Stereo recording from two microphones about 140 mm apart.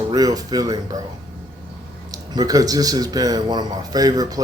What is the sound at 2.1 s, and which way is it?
Speech, 25° right (ahead or behind).